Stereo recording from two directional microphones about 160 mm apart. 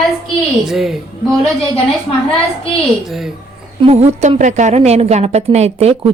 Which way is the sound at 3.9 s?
45° right (ahead or behind).